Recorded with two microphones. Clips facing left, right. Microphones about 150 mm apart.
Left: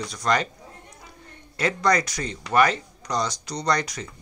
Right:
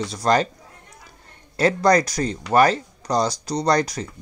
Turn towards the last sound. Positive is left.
turn(degrees=-35)  # may be behind; listen again after turning